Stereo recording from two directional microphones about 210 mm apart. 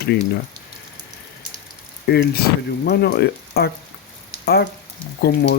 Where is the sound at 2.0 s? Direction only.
50° left (ahead or behind).